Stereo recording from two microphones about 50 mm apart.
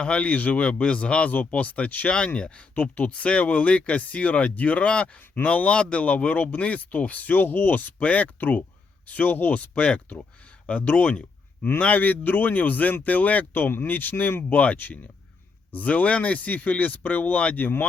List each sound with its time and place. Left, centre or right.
0.0 s speech: left
14.5 s speech: left